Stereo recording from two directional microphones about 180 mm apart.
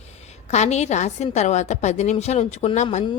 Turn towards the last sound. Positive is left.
turn(degrees=35)  # may be behind; listen again after turning